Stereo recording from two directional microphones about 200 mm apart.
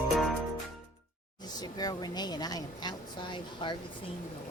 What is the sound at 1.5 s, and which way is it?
Speech, 20° left (ahead or behind).